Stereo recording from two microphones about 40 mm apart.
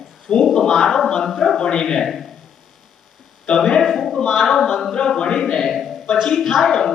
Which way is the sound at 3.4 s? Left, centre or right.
Centre.